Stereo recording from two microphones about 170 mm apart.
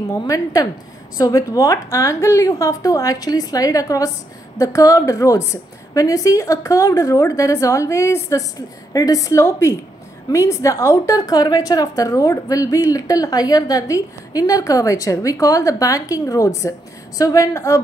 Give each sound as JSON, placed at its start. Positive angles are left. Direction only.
{"t": 0.1, "sound": "a woman's voice", "side_deg": 20}